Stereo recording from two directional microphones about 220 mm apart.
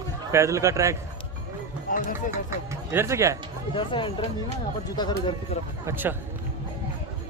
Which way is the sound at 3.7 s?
20° left (ahead or behind).